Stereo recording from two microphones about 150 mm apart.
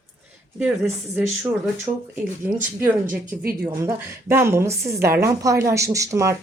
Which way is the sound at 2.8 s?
10° right (ahead or behind).